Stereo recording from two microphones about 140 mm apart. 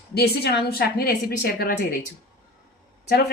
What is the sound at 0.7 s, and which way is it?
A woman's voice, 90° left.